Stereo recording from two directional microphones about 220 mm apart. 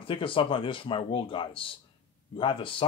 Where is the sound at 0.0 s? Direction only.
25° left (ahead or behind).